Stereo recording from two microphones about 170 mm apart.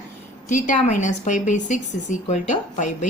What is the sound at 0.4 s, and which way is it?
A woman's voice, 45° left (ahead or behind).